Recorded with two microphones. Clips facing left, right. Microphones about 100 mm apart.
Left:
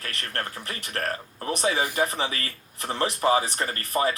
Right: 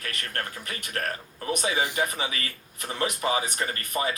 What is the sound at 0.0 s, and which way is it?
Speech, 30° left (ahead or behind).